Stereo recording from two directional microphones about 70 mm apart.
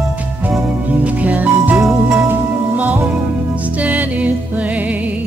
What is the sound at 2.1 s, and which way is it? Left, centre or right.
Music, right.